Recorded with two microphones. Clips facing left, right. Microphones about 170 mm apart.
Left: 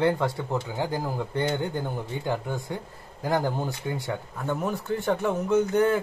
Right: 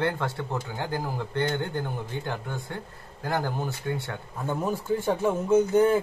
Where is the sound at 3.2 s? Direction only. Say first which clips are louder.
Left 3 dB; 15° left (ahead or behind).